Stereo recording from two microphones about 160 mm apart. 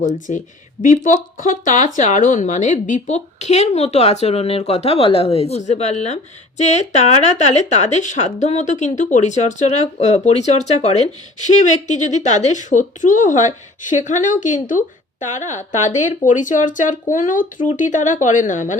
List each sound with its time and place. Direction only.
0.3 s speech: 55° left (ahead or behind)